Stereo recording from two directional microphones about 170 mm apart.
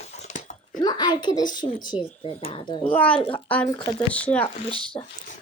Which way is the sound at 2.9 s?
10° left (ahead or behind).